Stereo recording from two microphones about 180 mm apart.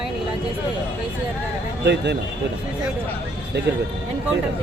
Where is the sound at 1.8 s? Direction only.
70° right (ahead or behind).